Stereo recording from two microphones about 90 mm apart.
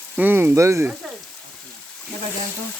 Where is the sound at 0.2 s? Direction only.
25° right (ahead or behind).